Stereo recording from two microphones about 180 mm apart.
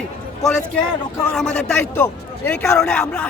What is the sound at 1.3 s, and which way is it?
A man's voice, 5° left (ahead or behind).